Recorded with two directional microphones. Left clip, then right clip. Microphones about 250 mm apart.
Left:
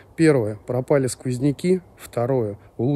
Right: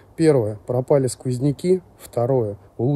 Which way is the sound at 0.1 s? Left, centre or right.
Centre.